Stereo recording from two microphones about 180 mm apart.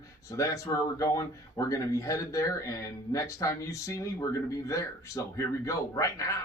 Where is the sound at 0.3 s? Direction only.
20° left (ahead or behind).